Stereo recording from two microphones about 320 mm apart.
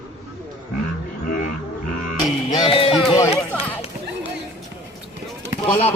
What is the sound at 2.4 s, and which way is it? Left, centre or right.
Music, centre.